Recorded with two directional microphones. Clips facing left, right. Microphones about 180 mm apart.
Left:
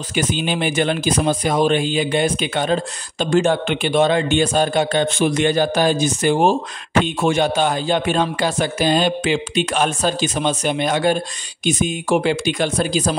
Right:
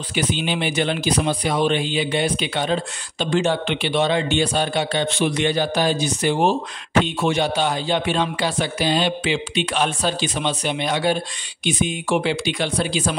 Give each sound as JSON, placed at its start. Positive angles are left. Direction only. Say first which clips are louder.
{"t": 0.1, "sound": "speech", "louder": "left 2 dB", "side_deg": 45}